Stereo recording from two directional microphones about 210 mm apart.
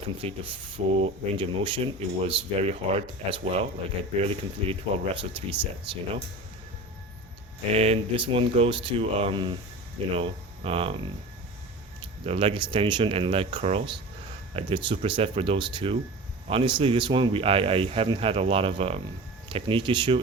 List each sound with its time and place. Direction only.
0.2 s speech: 25° right (ahead or behind)
7.7 s speech: 30° right (ahead or behind)
12.2 s speech: 25° right (ahead or behind)